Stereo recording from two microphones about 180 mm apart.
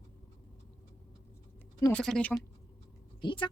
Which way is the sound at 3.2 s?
25° left (ahead or behind).